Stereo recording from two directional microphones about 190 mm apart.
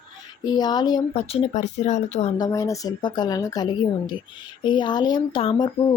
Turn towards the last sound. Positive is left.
turn(degrees=25)  # may be behind; listen again after turning